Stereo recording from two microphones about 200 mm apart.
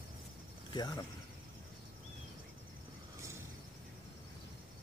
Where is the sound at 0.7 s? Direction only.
20° left (ahead or behind).